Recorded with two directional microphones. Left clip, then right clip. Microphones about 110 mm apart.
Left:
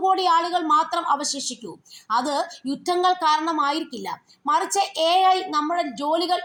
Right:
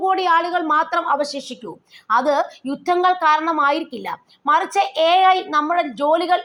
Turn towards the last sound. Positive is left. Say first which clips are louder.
# right 5 dB
turn(degrees=-5)  # may be behind; listen again after turning